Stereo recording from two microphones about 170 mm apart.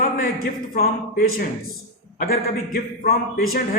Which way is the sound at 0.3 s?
60° left (ahead or behind).